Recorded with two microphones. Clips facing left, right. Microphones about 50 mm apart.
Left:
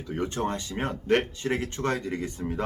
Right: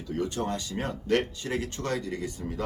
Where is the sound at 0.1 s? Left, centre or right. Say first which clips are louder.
Left 1 dB; left.